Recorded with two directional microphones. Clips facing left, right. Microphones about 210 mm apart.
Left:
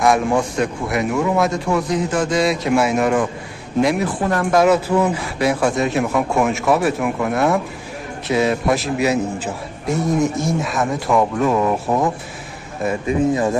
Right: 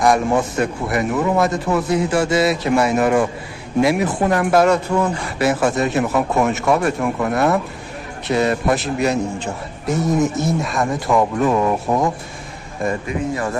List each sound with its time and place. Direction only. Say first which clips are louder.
0.0 s a man's voice: even; centre (ahead or behind)
4.6 s a man's voice: left 2 dB; 5° left (ahead or behind)
13.0 s speech: left 5 dB; 20° left (ahead or behind)